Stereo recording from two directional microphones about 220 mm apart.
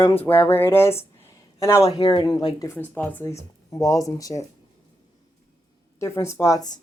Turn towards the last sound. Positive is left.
turn(degrees=15)  # may be behind; listen again after turning